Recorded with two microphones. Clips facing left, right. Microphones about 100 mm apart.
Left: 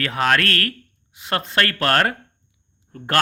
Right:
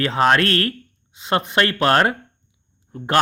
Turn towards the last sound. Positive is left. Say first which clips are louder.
# right 3 dB
turn(degrees=-20)  # may be behind; listen again after turning